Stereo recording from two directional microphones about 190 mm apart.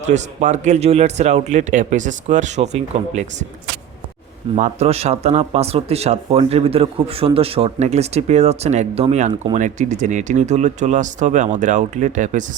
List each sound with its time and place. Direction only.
0.0 s speech: 35° right (ahead or behind)
4.5 s speech: 35° right (ahead or behind)